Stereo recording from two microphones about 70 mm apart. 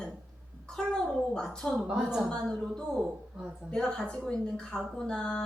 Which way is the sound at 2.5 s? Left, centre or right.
Centre.